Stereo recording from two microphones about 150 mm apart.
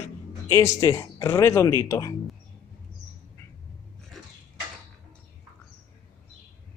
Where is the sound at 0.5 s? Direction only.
20° left (ahead or behind).